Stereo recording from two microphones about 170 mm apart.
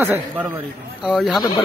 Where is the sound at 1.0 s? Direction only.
Centre (ahead or behind).